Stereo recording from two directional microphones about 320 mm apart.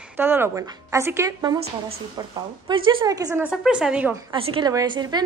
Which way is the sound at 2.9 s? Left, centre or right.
Centre.